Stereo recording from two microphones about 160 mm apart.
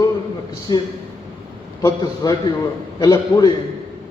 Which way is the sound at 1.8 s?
20° left (ahead or behind).